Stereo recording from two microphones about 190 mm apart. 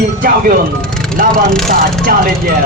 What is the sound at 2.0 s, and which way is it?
Speech, 50° right (ahead or behind).